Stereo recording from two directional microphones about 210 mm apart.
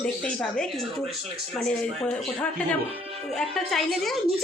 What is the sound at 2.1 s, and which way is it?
Speech, 5° left (ahead or behind).